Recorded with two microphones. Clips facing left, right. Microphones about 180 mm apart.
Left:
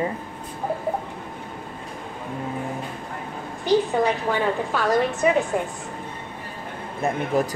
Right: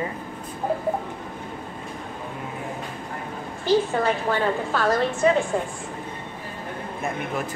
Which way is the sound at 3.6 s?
15° left (ahead or behind).